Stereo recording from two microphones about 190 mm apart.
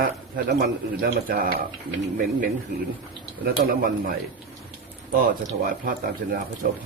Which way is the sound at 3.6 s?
50° right (ahead or behind).